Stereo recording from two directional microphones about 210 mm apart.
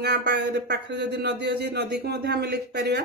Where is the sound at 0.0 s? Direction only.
50° right (ahead or behind).